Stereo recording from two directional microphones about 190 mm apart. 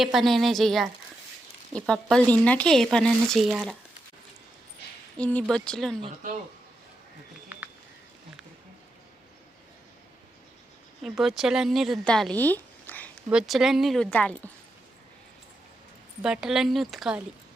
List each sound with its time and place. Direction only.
0.0 s speech: centre (ahead or behind)
5.1 s speech: 5° left (ahead or behind)
6.2 s a man's voice: 40° right (ahead or behind)
7.5 s a sound: 10° right (ahead or behind)
11.0 s speech: centre (ahead or behind)
13.3 s speech: centre (ahead or behind)
16.2 s speech: 5° right (ahead or behind)